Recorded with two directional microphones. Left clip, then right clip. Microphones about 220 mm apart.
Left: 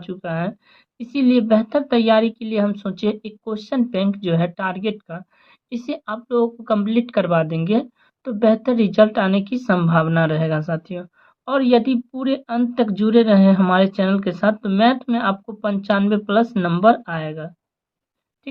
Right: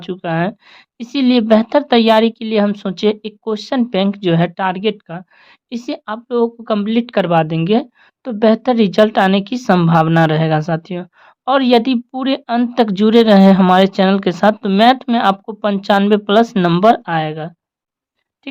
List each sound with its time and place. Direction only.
0.0 s speech: 40° right (ahead or behind)